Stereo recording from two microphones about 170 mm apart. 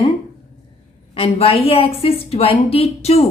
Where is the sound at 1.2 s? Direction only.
35° left (ahead or behind).